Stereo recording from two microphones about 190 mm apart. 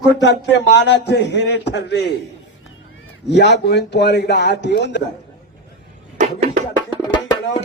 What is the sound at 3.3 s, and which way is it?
Speech, 65° left (ahead or behind).